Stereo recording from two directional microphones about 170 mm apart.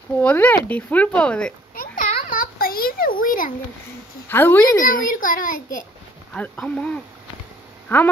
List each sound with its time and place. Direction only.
0.2 s speech: 10° left (ahead or behind)
1.8 s a sound: 55° left (ahead or behind)
4.3 s speech: 10° left (ahead or behind)
4.8 s a child's voice: 55° left (ahead or behind)
6.3 s speech: 10° left (ahead or behind)